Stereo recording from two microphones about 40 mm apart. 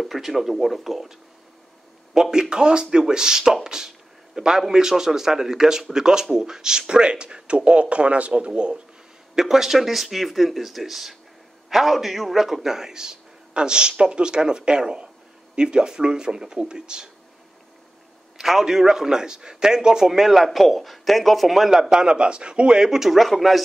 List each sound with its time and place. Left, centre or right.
0.0 s speech: centre
2.1 s a man's voice: centre
9.3 s a man's voice: centre
18.4 s a man's voice: centre